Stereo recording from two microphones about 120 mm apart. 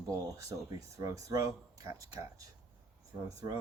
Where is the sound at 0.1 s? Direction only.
25° right (ahead or behind).